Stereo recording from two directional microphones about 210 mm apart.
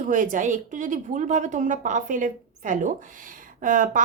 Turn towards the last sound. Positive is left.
turn(degrees=-40)  # may be behind; listen again after turning